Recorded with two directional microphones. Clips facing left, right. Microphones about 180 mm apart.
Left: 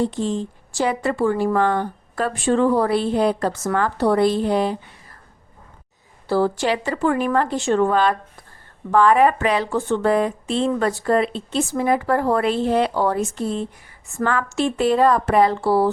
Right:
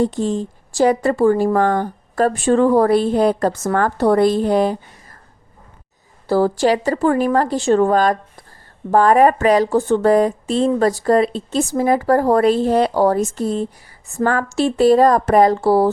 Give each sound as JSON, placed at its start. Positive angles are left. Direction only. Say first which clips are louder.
{"t": 0.0, "sound": "speech", "louder": "right 3 dB", "side_deg": -45}
{"t": 6.2, "sound": "speech", "louder": "right 4 dB", "side_deg": -40}